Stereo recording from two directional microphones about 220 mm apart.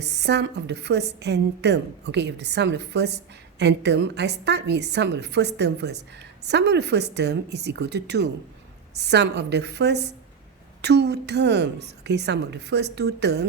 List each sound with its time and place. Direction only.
0.0 s a woman's voice: 50° right (ahead or behind)